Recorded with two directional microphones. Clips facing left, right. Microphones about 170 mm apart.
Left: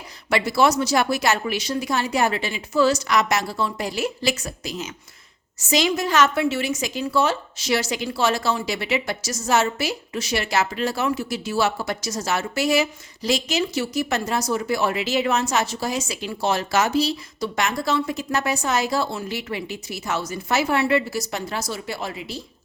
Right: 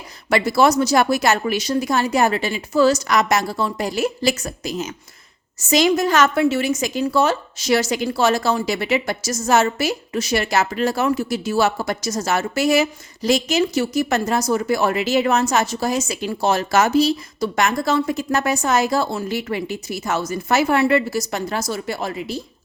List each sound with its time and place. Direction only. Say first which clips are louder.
0.3 s a woman's voice: right 3 dB; 45° right (ahead or behind)